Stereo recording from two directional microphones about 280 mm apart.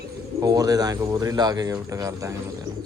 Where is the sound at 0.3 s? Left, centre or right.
Centre.